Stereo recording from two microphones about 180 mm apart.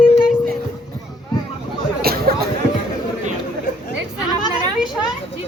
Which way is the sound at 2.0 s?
55° right (ahead or behind).